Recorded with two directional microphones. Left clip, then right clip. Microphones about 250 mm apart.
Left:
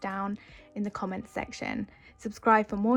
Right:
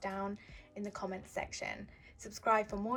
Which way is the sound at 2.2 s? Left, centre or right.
Left.